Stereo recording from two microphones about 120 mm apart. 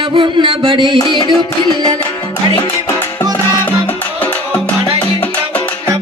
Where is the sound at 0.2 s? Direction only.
45° right (ahead or behind).